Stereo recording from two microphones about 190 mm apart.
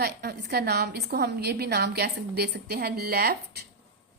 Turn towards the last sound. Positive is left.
turn(degrees=-55)  # may be behind; listen again after turning